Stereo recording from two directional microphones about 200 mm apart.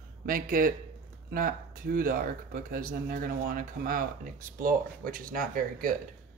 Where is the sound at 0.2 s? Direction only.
45° right (ahead or behind).